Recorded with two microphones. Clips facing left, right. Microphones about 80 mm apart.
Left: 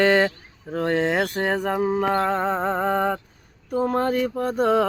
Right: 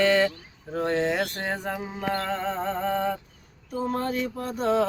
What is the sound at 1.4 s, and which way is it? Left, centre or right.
Music, left.